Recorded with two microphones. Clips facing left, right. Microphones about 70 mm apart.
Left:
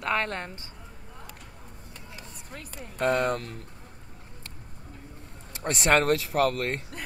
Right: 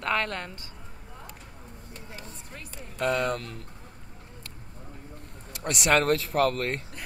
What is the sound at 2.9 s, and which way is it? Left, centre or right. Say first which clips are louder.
Speech: left 2 dB; left.